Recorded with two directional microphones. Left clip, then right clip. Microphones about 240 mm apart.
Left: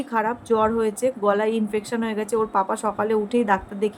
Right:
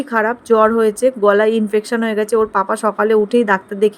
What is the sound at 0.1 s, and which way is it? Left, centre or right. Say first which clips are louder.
Speech: right 8 dB; right.